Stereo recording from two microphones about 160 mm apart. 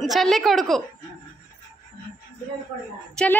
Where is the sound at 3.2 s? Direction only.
5° left (ahead or behind).